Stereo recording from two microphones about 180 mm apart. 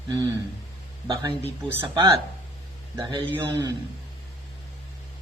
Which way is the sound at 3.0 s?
25° right (ahead or behind).